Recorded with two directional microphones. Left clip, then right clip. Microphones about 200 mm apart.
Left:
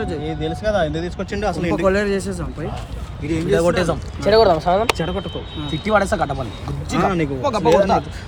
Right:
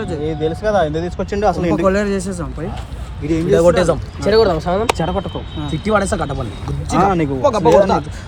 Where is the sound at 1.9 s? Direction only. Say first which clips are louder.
Right 1 dB; 5° right (ahead or behind).